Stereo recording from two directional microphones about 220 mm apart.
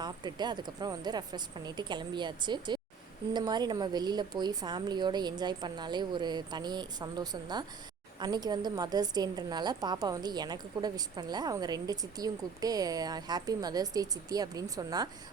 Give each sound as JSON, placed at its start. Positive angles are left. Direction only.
{"t": 0.0, "sound": "a woman's voice", "side_deg": -20}